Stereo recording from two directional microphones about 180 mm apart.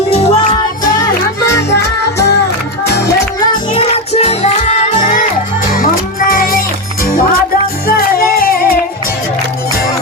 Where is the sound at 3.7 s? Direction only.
35° left (ahead or behind).